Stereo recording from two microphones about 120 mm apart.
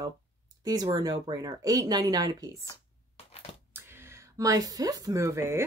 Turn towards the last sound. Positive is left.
turn(degrees=-25)  # may be behind; listen again after turning